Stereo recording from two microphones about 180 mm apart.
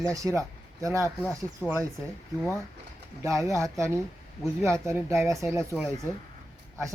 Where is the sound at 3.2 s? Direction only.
15° right (ahead or behind).